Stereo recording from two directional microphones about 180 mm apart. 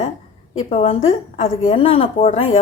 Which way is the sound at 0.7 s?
35° left (ahead or behind).